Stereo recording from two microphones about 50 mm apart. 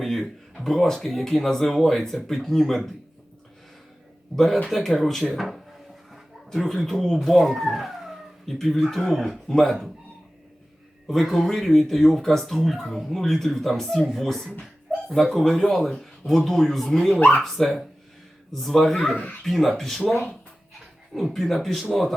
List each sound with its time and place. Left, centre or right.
0.0 s speech: centre
4.4 s speech: centre
6.1 s a sound: centre
8.5 s speech: centre
11.1 s speech: centre
17.2 s speech: left
17.4 s speech: centre